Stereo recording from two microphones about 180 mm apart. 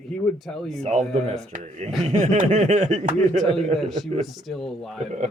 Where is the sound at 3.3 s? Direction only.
Centre (ahead or behind).